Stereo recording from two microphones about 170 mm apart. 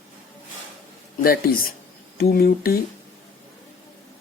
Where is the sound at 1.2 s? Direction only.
60° left (ahead or behind).